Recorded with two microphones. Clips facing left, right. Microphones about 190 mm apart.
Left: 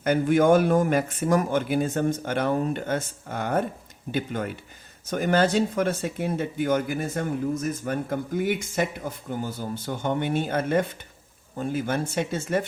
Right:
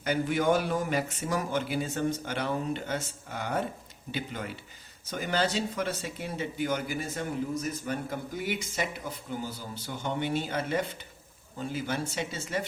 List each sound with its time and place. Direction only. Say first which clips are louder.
0.0 s speech: left 7 dB; 50° left (ahead or behind)